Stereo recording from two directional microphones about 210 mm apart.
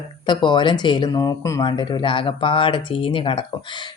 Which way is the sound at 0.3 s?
20° left (ahead or behind).